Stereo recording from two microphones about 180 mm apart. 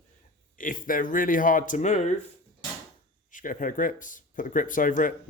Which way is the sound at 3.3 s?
50° left (ahead or behind).